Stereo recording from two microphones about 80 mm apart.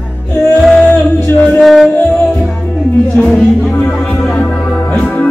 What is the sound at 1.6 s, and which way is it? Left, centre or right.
Music, centre.